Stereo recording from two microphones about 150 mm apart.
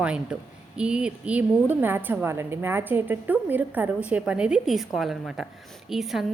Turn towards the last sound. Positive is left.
turn(degrees=0)  # may be behind; listen again after turning